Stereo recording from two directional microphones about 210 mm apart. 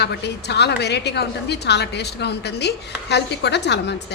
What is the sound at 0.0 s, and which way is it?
A woman's voice, 50° left (ahead or behind).